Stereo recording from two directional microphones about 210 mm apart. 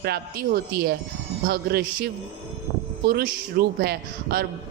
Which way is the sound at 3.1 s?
45° right (ahead or behind).